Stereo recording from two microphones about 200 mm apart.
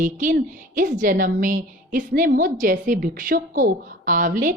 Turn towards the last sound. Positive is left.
turn(degrees=-40)  # may be behind; listen again after turning